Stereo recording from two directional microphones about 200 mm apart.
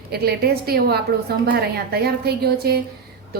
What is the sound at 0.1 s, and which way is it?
A woman's voice, 50° right (ahead or behind).